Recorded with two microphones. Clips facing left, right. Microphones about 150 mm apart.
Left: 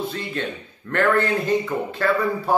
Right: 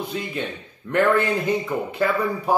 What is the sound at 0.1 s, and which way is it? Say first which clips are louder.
Speech: even; 10° right (ahead or behind).